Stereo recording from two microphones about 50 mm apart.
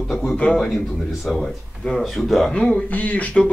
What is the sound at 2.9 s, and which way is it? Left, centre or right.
Speech, left.